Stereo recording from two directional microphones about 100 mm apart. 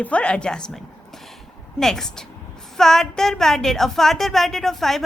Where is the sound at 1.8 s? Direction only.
5° left (ahead or behind).